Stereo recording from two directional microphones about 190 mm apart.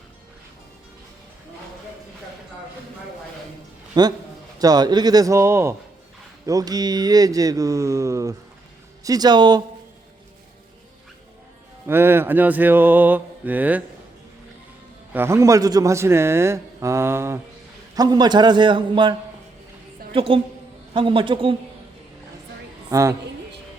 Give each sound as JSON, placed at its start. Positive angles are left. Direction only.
{"t": 3.9, "sound": "a man's voice", "side_deg": -20}
{"t": 11.9, "sound": "a man's voice", "side_deg": -10}
{"t": 15.1, "sound": "a man's voice", "side_deg": -15}
{"t": 20.1, "sound": "a man's voice", "side_deg": -30}
{"t": 22.9, "sound": "a woman's voice", "side_deg": -15}